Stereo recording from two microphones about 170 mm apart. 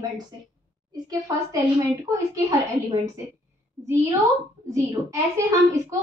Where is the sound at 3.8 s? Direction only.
20° right (ahead or behind).